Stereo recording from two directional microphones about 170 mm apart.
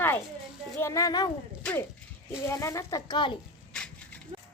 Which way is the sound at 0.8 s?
15° left (ahead or behind).